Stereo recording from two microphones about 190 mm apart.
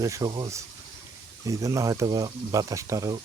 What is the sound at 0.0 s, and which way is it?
Speech, 20° right (ahead or behind).